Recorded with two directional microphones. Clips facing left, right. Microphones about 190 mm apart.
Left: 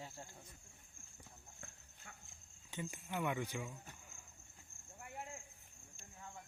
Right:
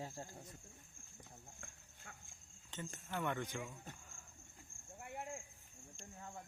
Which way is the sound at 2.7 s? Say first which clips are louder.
Left 2 dB; 10° left (ahead or behind).